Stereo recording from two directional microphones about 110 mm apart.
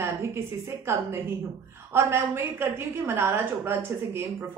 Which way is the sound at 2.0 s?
25° right (ahead or behind).